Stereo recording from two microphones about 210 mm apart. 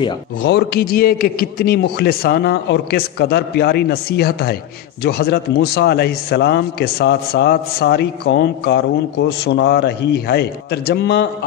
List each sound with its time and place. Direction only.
0.4 s a man's voice: 50° left (ahead or behind)